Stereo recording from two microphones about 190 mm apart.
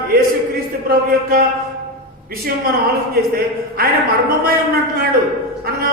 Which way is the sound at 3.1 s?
50° right (ahead or behind).